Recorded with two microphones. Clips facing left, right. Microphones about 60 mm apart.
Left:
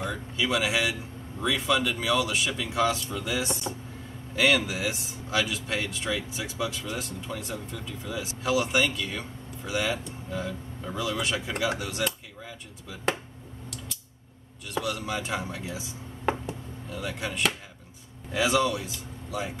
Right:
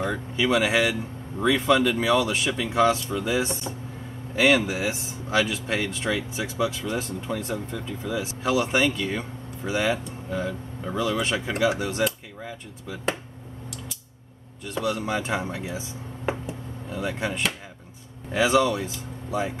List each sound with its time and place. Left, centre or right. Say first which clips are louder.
0.0 s speech: right 5 dB; right
14.7 s speech: right 4 dB; right
16.9 s speech: right 5 dB; right